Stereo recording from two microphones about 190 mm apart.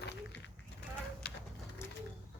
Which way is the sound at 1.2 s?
60° left (ahead or behind).